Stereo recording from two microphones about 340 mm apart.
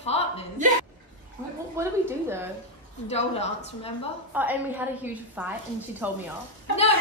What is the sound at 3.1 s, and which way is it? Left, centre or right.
Speech, centre.